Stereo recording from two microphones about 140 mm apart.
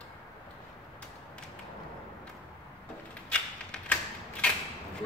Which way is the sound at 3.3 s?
5° left (ahead or behind).